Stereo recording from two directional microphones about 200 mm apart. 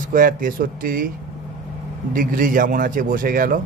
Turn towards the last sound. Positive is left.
turn(degrees=-45)  # may be behind; listen again after turning